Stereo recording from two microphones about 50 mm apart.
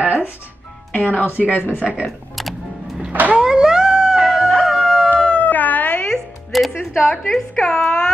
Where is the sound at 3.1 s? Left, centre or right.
Right.